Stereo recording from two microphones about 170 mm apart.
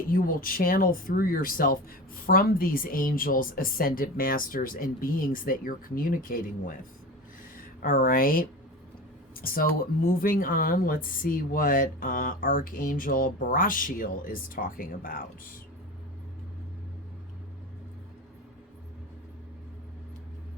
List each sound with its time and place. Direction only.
0.1 s speech: 55° left (ahead or behind)
9.3 s a sound: 60° left (ahead or behind)
10.2 s speech: 55° left (ahead or behind)